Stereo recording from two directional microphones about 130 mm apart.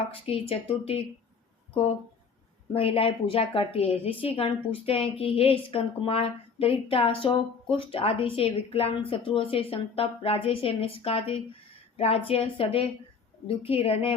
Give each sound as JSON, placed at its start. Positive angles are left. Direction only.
{"t": 0.0, "sound": "a woman's voice", "side_deg": 45}
{"t": 2.7, "sound": "a woman's voice", "side_deg": 45}